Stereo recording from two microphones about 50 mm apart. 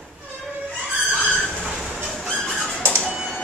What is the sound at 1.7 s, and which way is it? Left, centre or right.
Train, centre.